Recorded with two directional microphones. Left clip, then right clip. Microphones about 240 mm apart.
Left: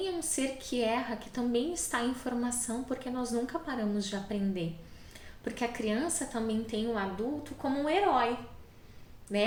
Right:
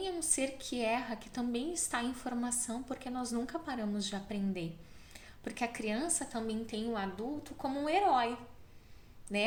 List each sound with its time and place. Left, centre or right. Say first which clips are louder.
0.0 s a woman's voice: left 2 dB; right
9.3 s a woman's voice: left 4 dB; right